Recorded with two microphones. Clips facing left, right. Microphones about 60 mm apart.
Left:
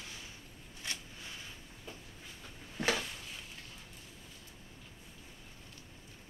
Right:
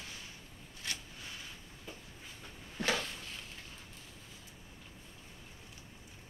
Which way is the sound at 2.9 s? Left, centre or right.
Centre.